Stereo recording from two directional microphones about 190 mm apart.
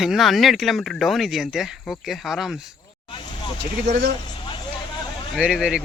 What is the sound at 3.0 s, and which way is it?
Vehicle, 25° left (ahead or behind).